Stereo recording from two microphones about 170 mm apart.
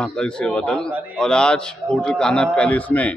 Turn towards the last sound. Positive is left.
turn(degrees=10)  # may be behind; listen again after turning